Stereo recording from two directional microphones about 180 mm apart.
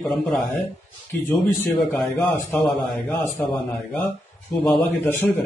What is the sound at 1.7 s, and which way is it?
A man's voice, 5° left (ahead or behind).